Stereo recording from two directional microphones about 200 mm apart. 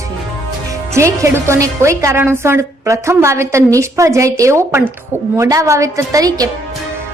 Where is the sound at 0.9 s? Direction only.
15° right (ahead or behind).